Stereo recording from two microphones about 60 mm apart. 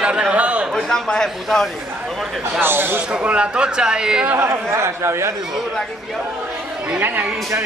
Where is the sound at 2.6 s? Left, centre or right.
Right.